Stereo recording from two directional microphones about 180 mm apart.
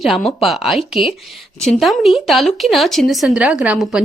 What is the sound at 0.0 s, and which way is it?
A woman's voice, centre (ahead or behind).